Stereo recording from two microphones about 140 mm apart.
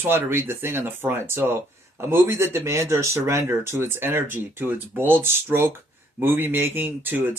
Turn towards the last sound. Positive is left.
turn(degrees=-15)  # may be behind; listen again after turning